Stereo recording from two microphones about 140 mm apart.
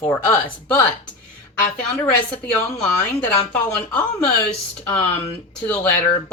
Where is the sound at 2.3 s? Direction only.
10° left (ahead or behind).